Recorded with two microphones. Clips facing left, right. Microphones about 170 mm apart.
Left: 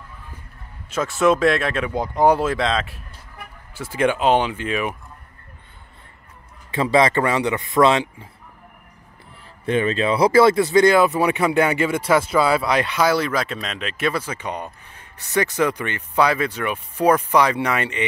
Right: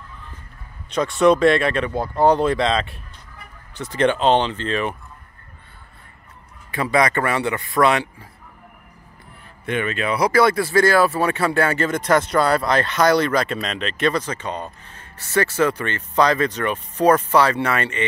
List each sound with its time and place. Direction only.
0.8 s speech: 5° left (ahead or behind)
2.0 s speech: 15° left (ahead or behind)
6.7 s a man's voice: 25° left (ahead or behind)
9.7 s speech: 30° left (ahead or behind); by 18.0 s 15° left (ahead or behind)